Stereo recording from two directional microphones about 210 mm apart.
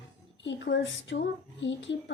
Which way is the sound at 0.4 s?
60° left (ahead or behind).